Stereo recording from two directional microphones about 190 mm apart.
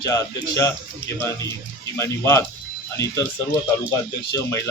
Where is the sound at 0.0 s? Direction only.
15° left (ahead or behind).